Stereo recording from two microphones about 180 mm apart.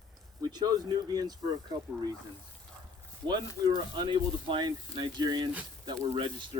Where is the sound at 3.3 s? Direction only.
25° right (ahead or behind).